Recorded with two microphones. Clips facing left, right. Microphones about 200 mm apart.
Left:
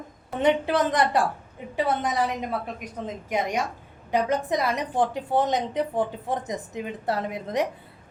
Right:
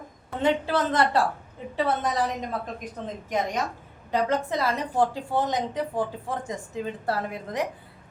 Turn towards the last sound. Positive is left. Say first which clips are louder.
# left 3 dB
turn(degrees=20)  # may be behind; listen again after turning